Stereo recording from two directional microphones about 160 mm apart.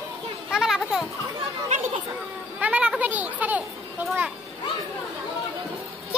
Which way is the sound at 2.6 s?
10° right (ahead or behind).